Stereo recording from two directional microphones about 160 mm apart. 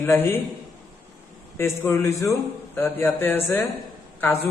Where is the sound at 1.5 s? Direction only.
15° left (ahead or behind).